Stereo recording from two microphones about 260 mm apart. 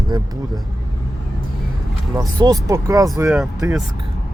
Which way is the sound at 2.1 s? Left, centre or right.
Centre.